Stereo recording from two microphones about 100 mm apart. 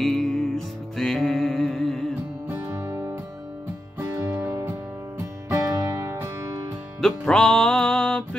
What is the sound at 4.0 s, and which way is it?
Music, 25° right (ahead or behind).